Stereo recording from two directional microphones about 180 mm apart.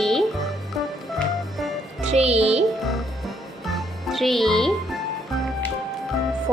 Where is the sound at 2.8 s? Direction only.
Centre (ahead or behind).